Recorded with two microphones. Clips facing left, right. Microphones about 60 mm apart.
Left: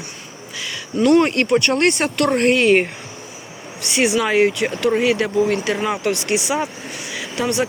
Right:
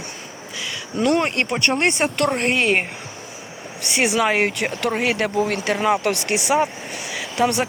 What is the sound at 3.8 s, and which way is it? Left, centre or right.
Speech, right.